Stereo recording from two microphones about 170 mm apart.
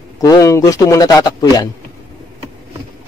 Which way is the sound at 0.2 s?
20° left (ahead or behind).